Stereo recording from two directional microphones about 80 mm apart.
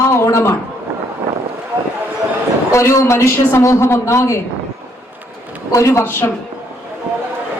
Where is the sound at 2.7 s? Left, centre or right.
Left.